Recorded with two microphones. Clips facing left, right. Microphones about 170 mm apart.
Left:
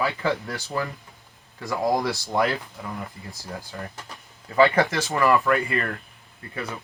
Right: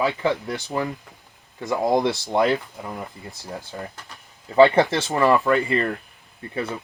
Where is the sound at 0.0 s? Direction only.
20° right (ahead or behind).